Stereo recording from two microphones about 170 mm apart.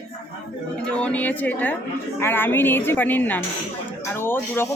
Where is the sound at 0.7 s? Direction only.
5° left (ahead or behind).